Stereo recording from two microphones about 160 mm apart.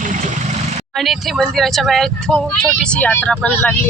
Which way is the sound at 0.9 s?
Centre (ahead or behind).